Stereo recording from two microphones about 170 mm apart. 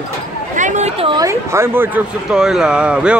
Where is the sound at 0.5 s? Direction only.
45° right (ahead or behind).